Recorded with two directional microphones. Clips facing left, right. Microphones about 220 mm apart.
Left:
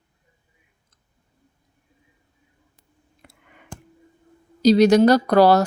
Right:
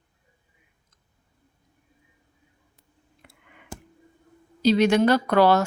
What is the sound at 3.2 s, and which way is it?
Clicking, 40° left (ahead or behind).